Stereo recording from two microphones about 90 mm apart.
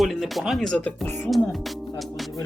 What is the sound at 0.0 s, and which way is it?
Speech, centre (ahead or behind).